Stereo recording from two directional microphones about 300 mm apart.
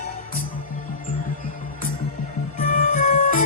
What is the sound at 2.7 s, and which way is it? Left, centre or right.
Music, left.